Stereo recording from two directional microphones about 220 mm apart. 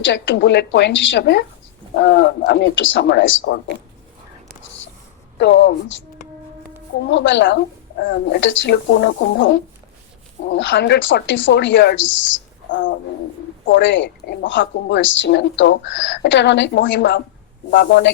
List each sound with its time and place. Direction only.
0.0 s a woman's voice: 55° left (ahead or behind)
5.4 s speech: 50° left (ahead or behind)
7.1 s a woman's voice: 55° left (ahead or behind)